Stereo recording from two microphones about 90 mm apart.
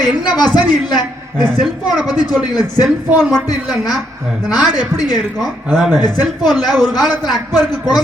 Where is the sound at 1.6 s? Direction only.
Centre (ahead or behind).